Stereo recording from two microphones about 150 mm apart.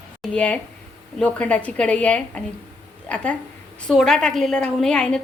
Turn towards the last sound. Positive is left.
turn(degrees=5)  # may be behind; listen again after turning